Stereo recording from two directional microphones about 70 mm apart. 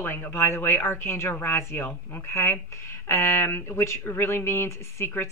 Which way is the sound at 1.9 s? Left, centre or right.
Left.